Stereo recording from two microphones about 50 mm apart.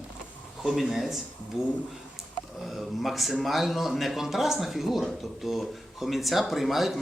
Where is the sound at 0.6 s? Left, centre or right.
Centre.